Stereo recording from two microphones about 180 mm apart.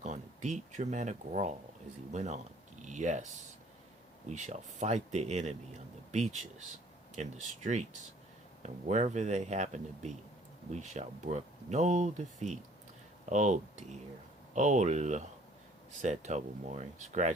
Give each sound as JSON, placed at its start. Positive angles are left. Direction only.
{"t": 0.0, "sound": "speech", "side_deg": -40}